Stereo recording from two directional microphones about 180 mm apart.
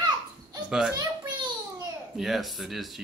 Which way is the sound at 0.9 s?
25° right (ahead or behind).